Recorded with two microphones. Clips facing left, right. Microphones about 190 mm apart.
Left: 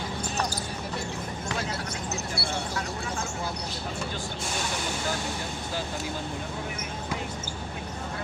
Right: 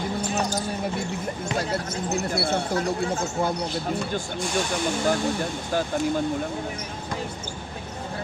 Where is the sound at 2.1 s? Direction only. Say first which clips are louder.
Right 10 dB; 55° right (ahead or behind).